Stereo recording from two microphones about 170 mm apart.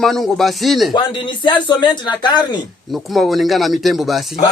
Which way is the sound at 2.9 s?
Centre (ahead or behind).